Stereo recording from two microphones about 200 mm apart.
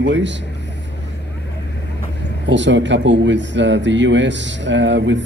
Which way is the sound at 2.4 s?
65° right (ahead or behind).